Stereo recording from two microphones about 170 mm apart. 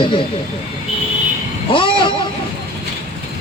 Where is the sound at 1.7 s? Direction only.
30° left (ahead or behind).